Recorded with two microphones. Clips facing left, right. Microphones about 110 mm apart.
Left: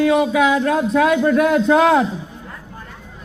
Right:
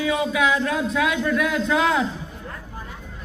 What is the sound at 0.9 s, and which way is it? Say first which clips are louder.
Speech: left 7 dB; 45° left (ahead or behind).